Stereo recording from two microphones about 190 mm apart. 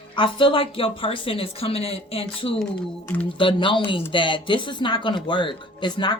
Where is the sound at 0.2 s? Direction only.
25° left (ahead or behind).